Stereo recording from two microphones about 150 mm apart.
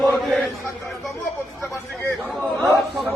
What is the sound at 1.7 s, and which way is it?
Chatter, 15° left (ahead or behind).